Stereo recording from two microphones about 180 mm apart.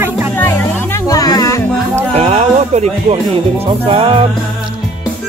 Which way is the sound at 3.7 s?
30° right (ahead or behind).